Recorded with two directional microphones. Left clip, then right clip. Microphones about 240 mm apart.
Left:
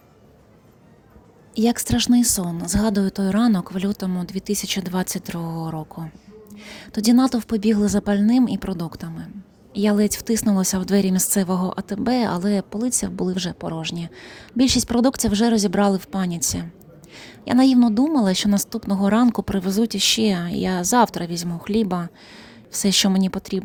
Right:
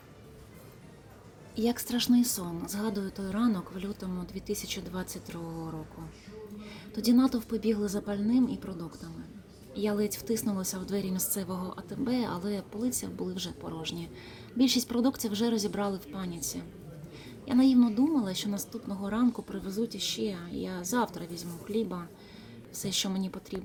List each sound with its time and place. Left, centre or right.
1.5 s speech: left